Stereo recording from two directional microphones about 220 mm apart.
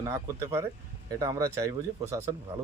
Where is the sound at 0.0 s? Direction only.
15° right (ahead or behind).